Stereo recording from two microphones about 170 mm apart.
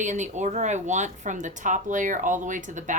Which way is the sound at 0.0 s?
45° right (ahead or behind).